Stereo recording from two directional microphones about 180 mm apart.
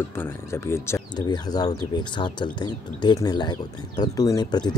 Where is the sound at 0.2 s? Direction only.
15° left (ahead or behind).